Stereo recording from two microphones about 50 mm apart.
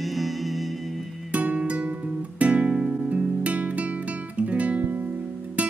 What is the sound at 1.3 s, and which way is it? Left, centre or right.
Music, right.